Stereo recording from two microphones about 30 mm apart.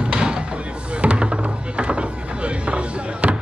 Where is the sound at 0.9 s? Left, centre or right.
Right.